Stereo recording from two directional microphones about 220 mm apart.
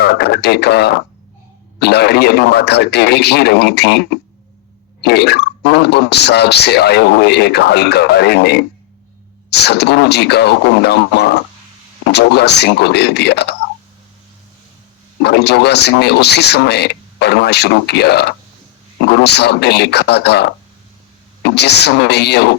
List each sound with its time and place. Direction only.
0.0 s speech: 50° left (ahead or behind)
15.2 s speech: 50° left (ahead or behind)